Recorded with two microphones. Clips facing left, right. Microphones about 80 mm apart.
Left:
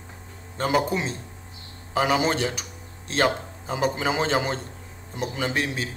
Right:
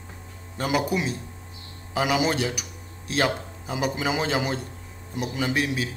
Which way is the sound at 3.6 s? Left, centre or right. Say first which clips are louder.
Left 2 dB; centre.